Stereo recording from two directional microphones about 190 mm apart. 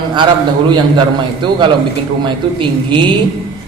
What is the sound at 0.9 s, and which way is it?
A man's voice, 25° right (ahead or behind).